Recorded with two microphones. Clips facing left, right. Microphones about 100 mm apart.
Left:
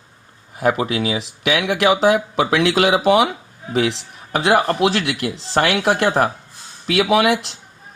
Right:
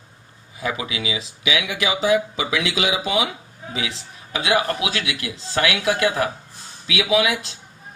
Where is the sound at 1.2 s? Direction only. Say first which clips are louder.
Left 5 dB; 80° left; by 4.8 s 55° left (ahead or behind).